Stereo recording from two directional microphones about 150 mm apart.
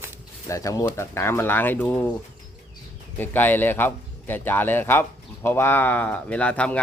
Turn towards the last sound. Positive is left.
turn(degrees=10)  # may be behind; listen again after turning